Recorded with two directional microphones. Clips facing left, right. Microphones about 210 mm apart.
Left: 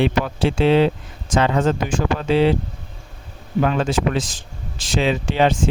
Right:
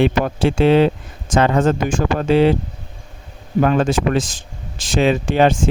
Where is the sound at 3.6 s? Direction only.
45° right (ahead or behind).